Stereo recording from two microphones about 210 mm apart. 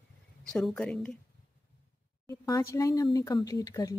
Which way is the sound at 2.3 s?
15° left (ahead or behind).